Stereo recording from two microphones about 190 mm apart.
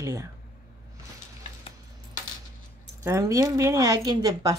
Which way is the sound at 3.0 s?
15° right (ahead or behind).